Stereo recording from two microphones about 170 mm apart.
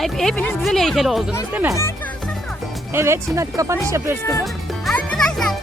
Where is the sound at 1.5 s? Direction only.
15° right (ahead or behind).